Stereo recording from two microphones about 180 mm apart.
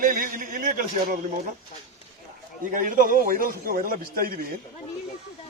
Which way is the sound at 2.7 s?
50° right (ahead or behind).